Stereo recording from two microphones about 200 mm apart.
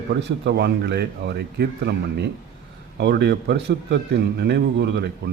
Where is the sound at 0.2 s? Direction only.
60° right (ahead or behind).